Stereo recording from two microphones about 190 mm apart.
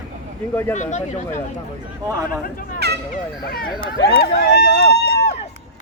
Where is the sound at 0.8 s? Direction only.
40° left (ahead or behind).